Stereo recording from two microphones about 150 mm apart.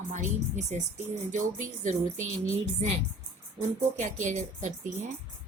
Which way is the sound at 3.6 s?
55° right (ahead or behind).